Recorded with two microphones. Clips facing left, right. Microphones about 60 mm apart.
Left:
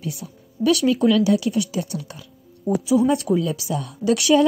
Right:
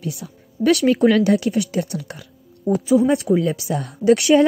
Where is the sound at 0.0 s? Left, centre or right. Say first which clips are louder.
Right 2 dB; right.